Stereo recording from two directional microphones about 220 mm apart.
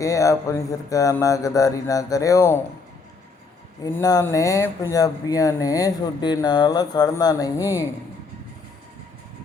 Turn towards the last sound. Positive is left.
turn(degrees=15)  # may be behind; listen again after turning